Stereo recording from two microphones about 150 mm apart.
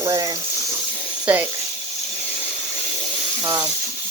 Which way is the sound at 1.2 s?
10° right (ahead or behind).